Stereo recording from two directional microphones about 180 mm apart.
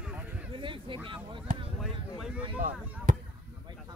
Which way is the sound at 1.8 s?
5° right (ahead or behind).